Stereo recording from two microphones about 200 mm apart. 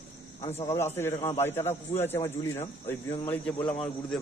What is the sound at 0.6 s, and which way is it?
Speech, 10° left (ahead or behind).